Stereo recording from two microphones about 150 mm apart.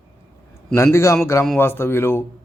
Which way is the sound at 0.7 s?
20° left (ahead or behind).